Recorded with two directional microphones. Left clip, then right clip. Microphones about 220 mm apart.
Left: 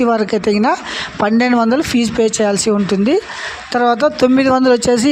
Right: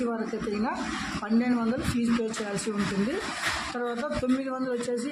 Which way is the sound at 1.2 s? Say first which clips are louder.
Left 16 dB; 45° left (ahead or behind).